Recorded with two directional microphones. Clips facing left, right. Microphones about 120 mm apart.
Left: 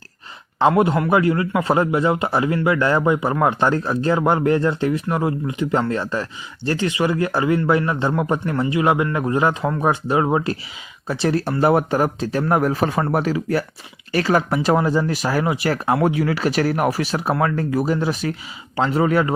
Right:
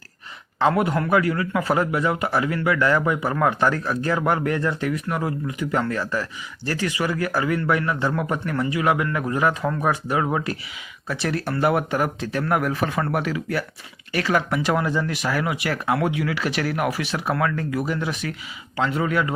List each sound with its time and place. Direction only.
0.6 s a man's voice: 25° left (ahead or behind)